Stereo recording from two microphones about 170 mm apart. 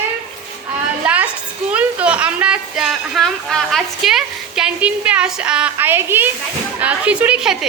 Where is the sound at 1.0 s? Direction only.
10° right (ahead or behind).